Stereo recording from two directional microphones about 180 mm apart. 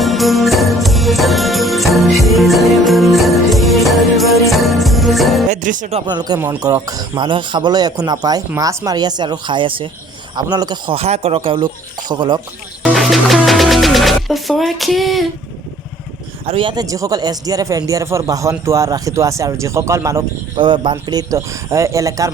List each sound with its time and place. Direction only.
0.0 s music: centre (ahead or behind)
5.5 s music: 45° right (ahead or behind)
6.1 s speech: 20° right (ahead or behind)
12.8 s music: centre (ahead or behind)
16.5 s speech: 30° right (ahead or behind)
20.6 s speech: 25° right (ahead or behind)